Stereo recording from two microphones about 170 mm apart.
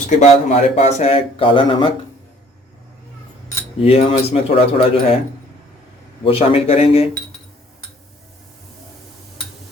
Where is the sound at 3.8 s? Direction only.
35° left (ahead or behind).